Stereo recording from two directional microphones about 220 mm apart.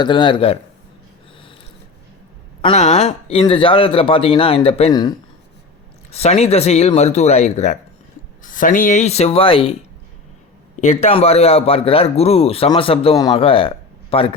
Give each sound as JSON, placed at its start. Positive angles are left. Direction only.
{"t": 0.0, "sound": "a man's voice", "side_deg": 20}
{"t": 2.6, "sound": "a man's voice", "side_deg": 25}
{"t": 6.1, "sound": "a man's voice", "side_deg": 30}
{"t": 10.8, "sound": "a man's voice", "side_deg": 30}